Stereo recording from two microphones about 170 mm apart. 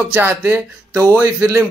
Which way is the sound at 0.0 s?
10° right (ahead or behind).